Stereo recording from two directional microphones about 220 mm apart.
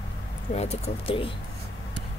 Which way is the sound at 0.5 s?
30° left (ahead or behind).